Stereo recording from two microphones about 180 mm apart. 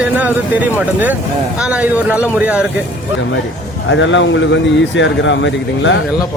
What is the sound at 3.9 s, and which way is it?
Speech, 90° left.